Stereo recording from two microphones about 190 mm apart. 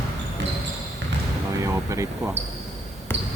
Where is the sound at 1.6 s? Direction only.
15° right (ahead or behind).